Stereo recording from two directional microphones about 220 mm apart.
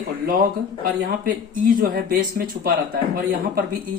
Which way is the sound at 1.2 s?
40° right (ahead or behind).